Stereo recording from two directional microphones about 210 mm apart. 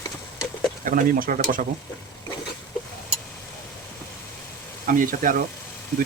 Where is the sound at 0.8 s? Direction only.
40° right (ahead or behind).